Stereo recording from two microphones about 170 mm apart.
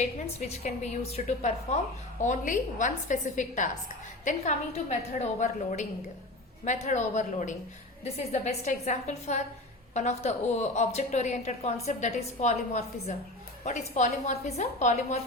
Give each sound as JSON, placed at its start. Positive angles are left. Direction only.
{"t": 0.0, "sound": "a woman's voice", "side_deg": 40}